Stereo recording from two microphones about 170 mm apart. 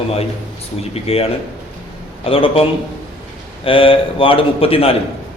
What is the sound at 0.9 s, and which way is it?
A man's voice, 35° left (ahead or behind).